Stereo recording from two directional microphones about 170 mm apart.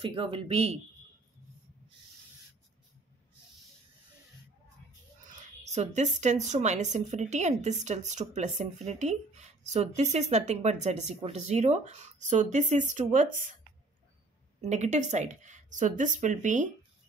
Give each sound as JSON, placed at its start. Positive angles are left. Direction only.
{"t": 0.0, "sound": "speech", "side_deg": -30}
{"t": 5.4, "sound": "speech", "side_deg": -40}
{"t": 14.6, "sound": "speech", "side_deg": -45}